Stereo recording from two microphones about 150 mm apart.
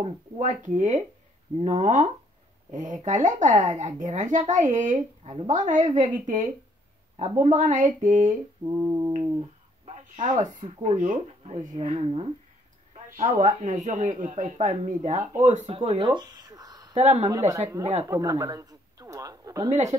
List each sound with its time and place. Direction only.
0.0 s speech: 55° right (ahead or behind)
7.2 s speech: 45° right (ahead or behind)
8.6 s speech: 25° right (ahead or behind)
9.8 s a sound: 55° right (ahead or behind)
10.8 s speech: 55° right (ahead or behind)
13.1 s speech: 55° right (ahead or behind); by 16.9 s 25° right (ahead or behind)
16.9 s speech: 50° right (ahead or behind)
17.3 s speech: 20° right (ahead or behind)
19.7 s speech: 50° right (ahead or behind)